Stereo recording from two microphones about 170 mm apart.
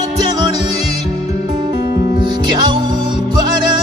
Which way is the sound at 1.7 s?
25° right (ahead or behind).